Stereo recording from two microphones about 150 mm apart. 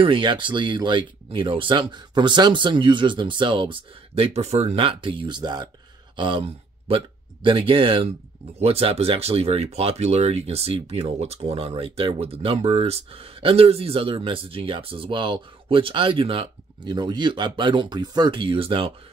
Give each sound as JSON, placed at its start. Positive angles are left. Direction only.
{"t": 0.0, "sound": "speech", "side_deg": -35}